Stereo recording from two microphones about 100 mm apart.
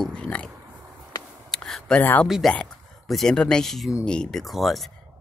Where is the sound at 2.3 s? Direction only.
5° right (ahead or behind).